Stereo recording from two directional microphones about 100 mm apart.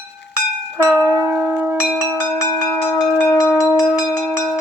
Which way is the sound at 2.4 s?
25° left (ahead or behind).